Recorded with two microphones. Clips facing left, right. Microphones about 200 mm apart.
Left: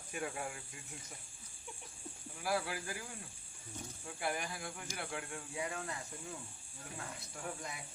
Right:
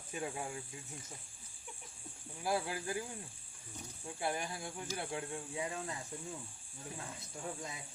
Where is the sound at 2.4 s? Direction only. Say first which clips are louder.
Right 1 dB; 25° right (ahead or behind).